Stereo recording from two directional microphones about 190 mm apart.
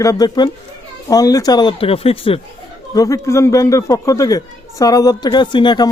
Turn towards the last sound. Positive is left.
turn(degrees=25)  # may be behind; listen again after turning